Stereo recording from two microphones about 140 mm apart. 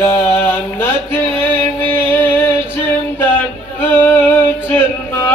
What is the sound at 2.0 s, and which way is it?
Female singing, 15° left (ahead or behind).